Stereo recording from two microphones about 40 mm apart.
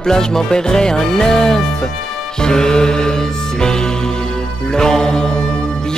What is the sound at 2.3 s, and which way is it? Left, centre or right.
Music, centre.